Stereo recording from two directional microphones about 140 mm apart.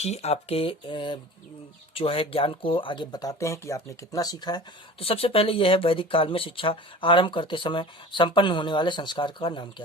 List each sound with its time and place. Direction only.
0.0 s speech: 50° left (ahead or behind); by 4.6 s 30° left (ahead or behind)
4.9 s speech: 40° left (ahead or behind)